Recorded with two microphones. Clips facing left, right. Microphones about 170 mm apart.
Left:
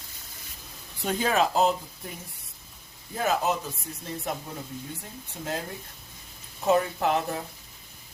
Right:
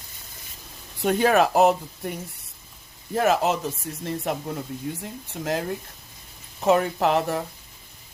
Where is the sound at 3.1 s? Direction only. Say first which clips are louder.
Right 5 dB; 80° right.